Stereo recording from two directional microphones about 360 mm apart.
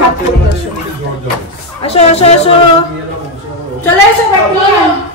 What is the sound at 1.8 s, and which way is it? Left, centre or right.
Speech, centre.